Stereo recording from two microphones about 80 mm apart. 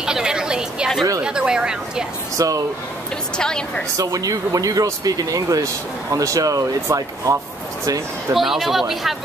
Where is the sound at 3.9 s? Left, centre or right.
Right.